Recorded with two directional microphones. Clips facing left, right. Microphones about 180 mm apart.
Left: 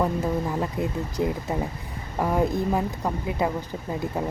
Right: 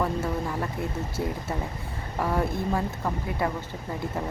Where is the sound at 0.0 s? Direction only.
20° left (ahead or behind).